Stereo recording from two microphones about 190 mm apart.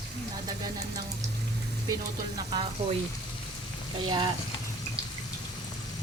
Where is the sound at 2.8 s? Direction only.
30° right (ahead or behind).